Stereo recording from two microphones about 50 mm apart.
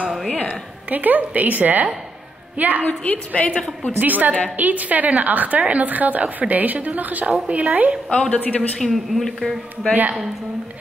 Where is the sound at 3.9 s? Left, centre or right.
Right.